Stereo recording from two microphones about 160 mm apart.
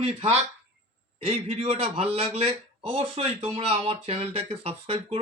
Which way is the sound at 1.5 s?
40° right (ahead or behind).